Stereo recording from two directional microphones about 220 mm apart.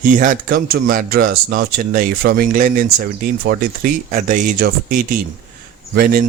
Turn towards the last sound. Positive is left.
turn(degrees=-40)  # may be behind; listen again after turning